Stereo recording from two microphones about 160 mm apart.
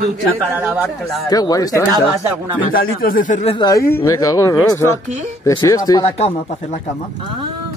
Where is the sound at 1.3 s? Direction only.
25° left (ahead or behind).